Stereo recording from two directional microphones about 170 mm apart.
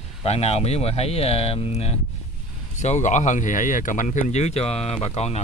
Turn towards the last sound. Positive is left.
turn(degrees=40)  # may be behind; listen again after turning